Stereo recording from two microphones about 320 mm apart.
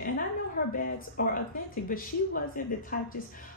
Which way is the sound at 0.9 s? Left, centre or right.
Left.